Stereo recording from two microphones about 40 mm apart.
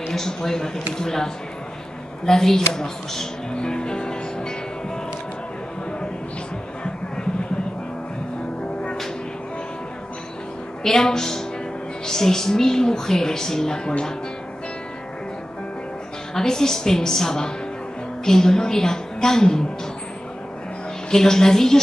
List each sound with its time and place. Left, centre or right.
0.1 s a woman's voice: centre
3.5 s music: left
10.8 s a woman's voice: centre
16.3 s a woman's voice: centre
21.1 s a woman's voice: centre